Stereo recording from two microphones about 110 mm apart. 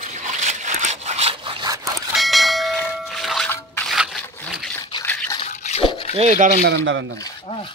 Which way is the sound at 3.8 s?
Centre (ahead or behind).